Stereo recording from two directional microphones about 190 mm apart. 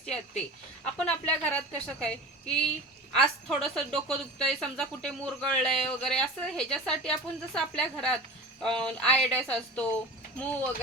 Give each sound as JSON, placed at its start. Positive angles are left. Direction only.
{"t": 0.0, "sound": "a woman's voice", "side_deg": 5}
{"t": 3.2, "sound": "a woman's voice", "side_deg": 0}